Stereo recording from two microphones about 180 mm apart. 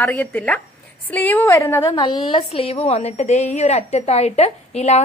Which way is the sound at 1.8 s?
25° left (ahead or behind).